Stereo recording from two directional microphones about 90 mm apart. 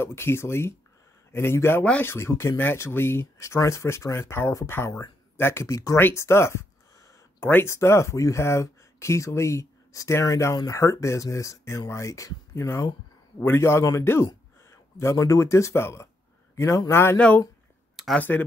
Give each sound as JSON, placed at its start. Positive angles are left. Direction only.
{"t": 0.0, "sound": "speech", "side_deg": 25}
{"t": 5.9, "sound": "a man's voice", "side_deg": 25}
{"t": 18.0, "sound": "a sound", "side_deg": 0}